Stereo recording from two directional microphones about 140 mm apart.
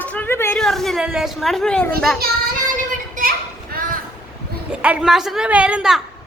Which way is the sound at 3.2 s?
65° right (ahead or behind).